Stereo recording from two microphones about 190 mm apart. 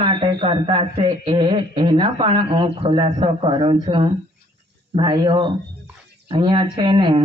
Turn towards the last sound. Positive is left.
turn(degrees=-25)  # may be behind; listen again after turning